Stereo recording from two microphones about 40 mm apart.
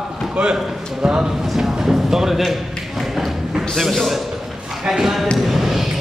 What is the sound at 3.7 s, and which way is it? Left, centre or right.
Speech, centre.